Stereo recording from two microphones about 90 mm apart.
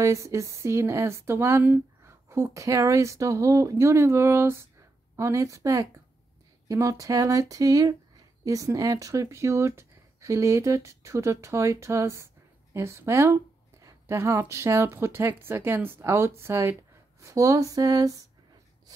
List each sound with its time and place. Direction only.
0.0 s a woman's voice: 35° right (ahead or behind)